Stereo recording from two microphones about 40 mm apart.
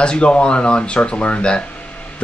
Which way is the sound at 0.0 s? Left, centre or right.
Left.